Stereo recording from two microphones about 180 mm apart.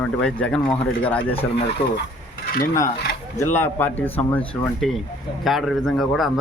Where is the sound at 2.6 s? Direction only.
15° left (ahead or behind); by 6.3 s centre (ahead or behind).